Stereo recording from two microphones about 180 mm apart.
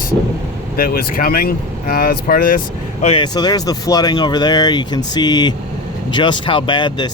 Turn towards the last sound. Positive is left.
turn(degrees=25)  # may be behind; listen again after turning